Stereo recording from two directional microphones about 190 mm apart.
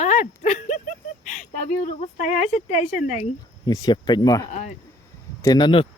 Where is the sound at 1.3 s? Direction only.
40° left (ahead or behind).